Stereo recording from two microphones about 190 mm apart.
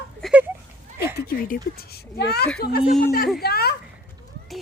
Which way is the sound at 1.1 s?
50° left (ahead or behind).